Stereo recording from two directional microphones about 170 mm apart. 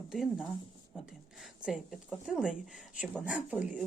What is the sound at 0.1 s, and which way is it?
Speech, 5° right (ahead or behind).